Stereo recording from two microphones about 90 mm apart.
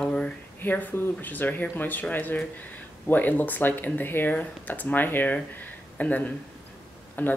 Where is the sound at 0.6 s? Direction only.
20° left (ahead or behind).